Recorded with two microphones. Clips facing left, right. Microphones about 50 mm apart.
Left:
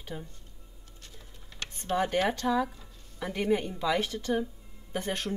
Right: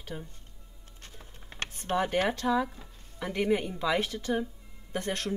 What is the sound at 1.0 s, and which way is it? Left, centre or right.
Typing, right.